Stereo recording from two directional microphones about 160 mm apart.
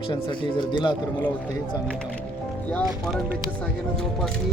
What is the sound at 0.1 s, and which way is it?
Speech, 30° left (ahead or behind).